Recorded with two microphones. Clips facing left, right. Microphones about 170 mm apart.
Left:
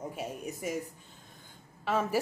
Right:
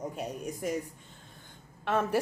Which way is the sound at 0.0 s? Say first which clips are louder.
Right 2 dB; 5° left (ahead or behind).